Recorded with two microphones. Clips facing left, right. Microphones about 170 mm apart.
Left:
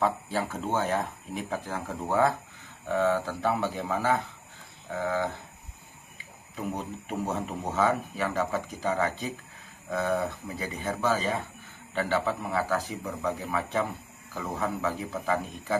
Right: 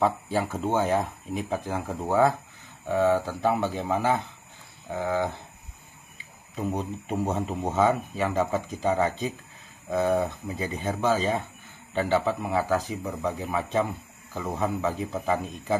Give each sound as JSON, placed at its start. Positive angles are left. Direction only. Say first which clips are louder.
{"t": 0.0, "sound": "speech", "louder": "right 3 dB", "side_deg": -15}
{"t": 6.5, "sound": "speech", "louder": "right 4 dB", "side_deg": -20}